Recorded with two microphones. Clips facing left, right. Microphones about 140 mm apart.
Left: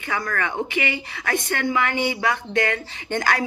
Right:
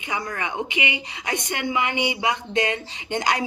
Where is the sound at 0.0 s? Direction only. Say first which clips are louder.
Left 3 dB; 20° right (ahead or behind).